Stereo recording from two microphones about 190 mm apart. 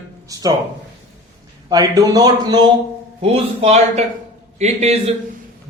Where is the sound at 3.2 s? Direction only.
30° right (ahead or behind).